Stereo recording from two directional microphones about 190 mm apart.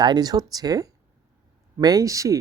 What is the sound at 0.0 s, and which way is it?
Speech, 20° right (ahead or behind).